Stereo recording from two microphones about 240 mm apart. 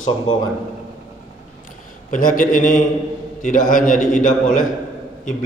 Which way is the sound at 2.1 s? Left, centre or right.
Left.